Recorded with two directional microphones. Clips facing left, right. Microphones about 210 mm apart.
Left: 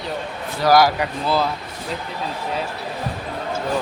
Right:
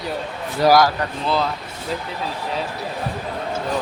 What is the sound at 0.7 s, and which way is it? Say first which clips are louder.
Speech: left 1 dB; 5° left (ahead or behind).